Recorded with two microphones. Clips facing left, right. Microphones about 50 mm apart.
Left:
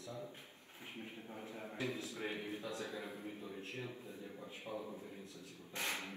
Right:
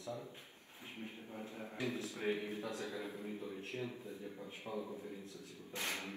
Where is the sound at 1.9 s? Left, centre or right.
Right.